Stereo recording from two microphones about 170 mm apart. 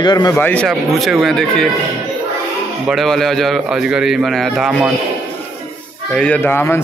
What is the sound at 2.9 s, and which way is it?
A man's voice, centre (ahead or behind).